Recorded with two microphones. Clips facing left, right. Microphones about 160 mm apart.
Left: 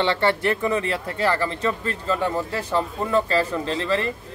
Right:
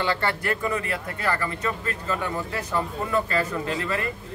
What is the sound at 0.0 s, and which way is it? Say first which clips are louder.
A man's voice: left 5 dB; 25° left (ahead or behind).